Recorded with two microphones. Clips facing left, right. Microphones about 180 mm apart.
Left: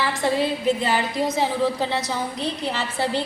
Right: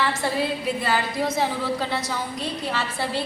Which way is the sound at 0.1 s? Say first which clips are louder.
Left 3 dB; 20° left (ahead or behind).